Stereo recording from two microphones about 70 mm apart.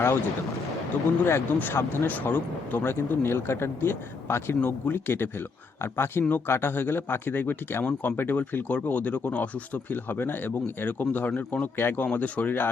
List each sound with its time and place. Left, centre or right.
1.2 s speech: left
2.9 s speech: left
11.8 s speech: left